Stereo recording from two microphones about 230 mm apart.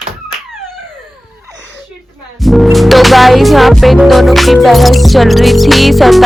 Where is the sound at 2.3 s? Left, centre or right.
Centre.